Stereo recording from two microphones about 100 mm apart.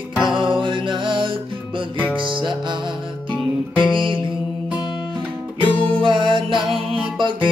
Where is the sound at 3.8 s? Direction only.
55° right (ahead or behind).